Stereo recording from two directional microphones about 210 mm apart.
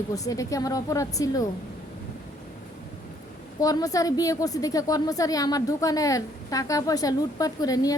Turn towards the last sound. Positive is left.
turn(degrees=15)  # may be behind; listen again after turning